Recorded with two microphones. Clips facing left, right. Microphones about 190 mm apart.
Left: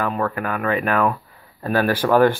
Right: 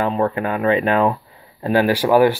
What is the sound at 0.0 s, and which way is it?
Speech, 25° right (ahead or behind).